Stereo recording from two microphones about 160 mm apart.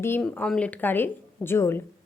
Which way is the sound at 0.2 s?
5° left (ahead or behind).